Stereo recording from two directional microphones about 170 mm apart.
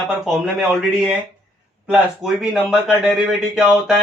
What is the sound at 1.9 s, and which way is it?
A man's voice, 5° right (ahead or behind).